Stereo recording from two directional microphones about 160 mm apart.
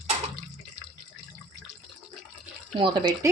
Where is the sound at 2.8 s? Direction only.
30° right (ahead or behind).